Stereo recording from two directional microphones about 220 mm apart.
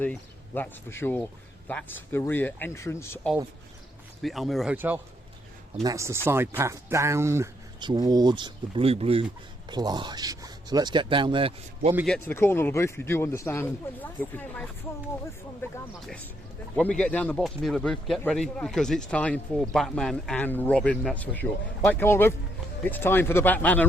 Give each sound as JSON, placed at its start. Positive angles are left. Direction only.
{"t": 0.0, "sound": "speech", "side_deg": 10}
{"t": 4.2, "sound": "speech", "side_deg": 0}
{"t": 12.0, "sound": "speech", "side_deg": 5}
{"t": 15.7, "sound": "speech", "side_deg": 5}